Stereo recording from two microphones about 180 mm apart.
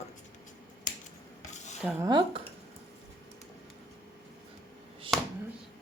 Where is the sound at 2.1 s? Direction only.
25° right (ahead or behind).